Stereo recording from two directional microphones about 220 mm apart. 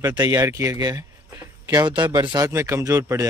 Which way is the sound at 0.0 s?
15° right (ahead or behind).